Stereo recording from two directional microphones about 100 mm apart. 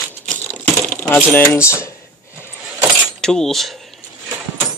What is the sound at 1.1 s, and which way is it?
Speech, 20° left (ahead or behind).